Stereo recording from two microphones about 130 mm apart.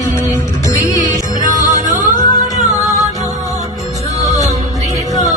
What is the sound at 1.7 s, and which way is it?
Music, 75° right (ahead or behind).